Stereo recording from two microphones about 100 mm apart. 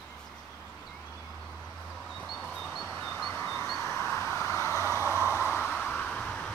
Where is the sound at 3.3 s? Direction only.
20° left (ahead or behind).